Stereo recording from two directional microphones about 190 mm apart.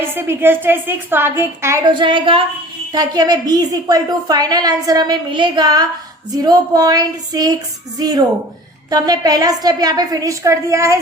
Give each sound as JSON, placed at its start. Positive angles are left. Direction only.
{"t": 0.0, "sound": "a woman's voice", "side_deg": -10}